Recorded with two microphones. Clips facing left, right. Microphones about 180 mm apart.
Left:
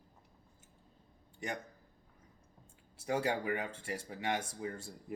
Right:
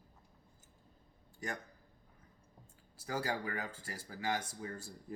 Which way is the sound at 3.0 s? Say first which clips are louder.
Left 4 dB; 25° left (ahead or behind).